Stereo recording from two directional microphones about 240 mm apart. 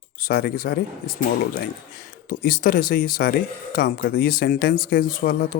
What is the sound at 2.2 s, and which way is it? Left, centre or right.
Speech, left.